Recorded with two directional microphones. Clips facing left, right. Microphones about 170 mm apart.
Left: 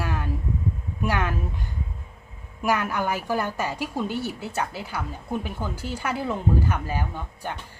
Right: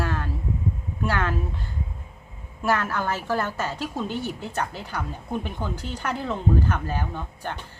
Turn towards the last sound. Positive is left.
turn(degrees=10)  # may be behind; listen again after turning